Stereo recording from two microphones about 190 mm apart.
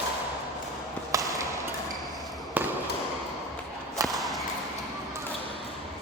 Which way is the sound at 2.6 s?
10° right (ahead or behind).